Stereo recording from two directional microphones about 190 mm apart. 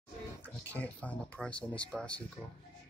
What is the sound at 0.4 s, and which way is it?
Speech, 10° left (ahead or behind).